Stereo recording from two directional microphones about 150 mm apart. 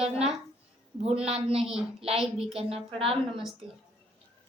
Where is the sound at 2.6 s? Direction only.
40° right (ahead or behind).